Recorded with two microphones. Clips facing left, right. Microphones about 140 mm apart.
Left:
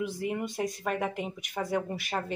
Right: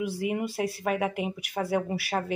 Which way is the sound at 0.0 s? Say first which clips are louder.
Right 3 dB; 10° right (ahead or behind).